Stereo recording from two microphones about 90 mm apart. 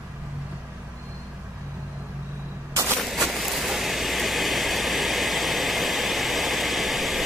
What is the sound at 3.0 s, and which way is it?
Vehicle, centre (ahead or behind).